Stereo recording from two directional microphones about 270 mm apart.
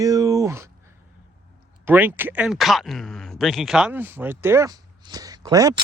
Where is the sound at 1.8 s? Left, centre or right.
Centre.